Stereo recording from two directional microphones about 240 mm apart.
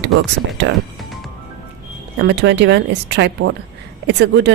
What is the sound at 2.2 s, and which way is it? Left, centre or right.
Speech, right.